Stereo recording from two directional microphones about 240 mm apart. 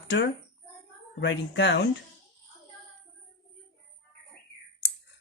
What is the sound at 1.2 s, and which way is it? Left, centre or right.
Speech, left.